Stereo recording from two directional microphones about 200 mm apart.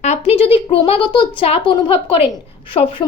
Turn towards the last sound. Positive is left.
turn(degrees=25)  # may be behind; listen again after turning